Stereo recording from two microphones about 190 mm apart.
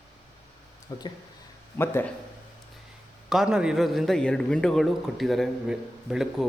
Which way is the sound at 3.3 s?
5° right (ahead or behind).